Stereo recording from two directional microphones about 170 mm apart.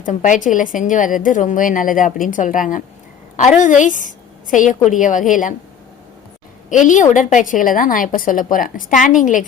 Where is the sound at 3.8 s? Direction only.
50° left (ahead or behind).